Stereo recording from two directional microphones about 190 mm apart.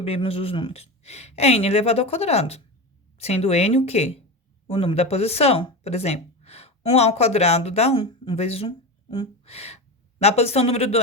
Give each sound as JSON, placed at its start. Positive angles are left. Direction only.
{"t": 0.0, "sound": "speech", "side_deg": 30}